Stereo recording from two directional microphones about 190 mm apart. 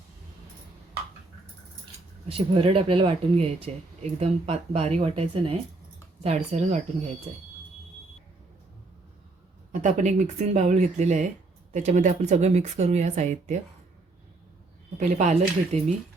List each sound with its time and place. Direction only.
2.3 s speech: 30° right (ahead or behind)
9.8 s speech: 40° right (ahead or behind)
14.9 s speech: 40° right (ahead or behind)